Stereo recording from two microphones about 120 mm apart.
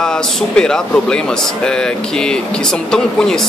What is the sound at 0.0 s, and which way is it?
A man's voice, 5° left (ahead or behind).